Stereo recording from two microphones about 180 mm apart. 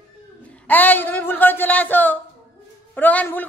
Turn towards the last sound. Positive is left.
turn(degrees=10)  # may be behind; listen again after turning